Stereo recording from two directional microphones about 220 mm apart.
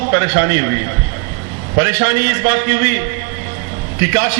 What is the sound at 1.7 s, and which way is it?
A man's voice, 15° right (ahead or behind).